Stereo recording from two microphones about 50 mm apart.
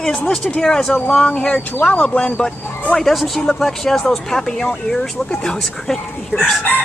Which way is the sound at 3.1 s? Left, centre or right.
Centre.